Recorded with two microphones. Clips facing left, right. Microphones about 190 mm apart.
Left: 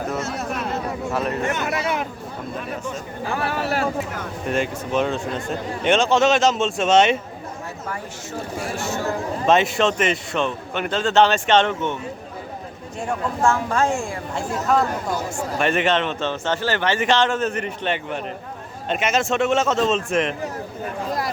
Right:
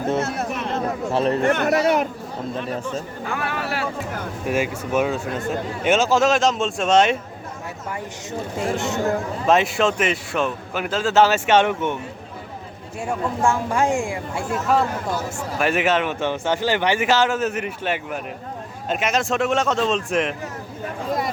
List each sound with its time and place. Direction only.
0.2 s speech: 55° right (ahead or behind)
0.5 s a sound: centre (ahead or behind)
1.1 s speech: 30° right (ahead or behind)
1.5 s speech: 55° right (ahead or behind)
3.3 s speech: 35° left (ahead or behind)
4.4 s speech: 10° right (ahead or behind)
7.9 s speech: 20° right (ahead or behind)
9.5 s speech: centre (ahead or behind)
13.0 s speech: 10° right (ahead or behind)
15.5 s speech: 5° right (ahead or behind)